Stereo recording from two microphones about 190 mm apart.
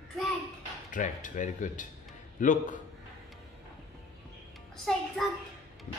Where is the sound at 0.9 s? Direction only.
40° left (ahead or behind).